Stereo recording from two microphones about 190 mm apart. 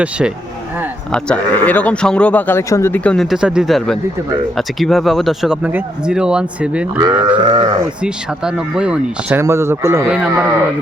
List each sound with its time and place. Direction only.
1.1 s a man's voice: 5° left (ahead or behind); by 7.3 s 10° right (ahead or behind)
7.3 s speech: 25° right (ahead or behind)
8.0 s speech: 5° right (ahead or behind)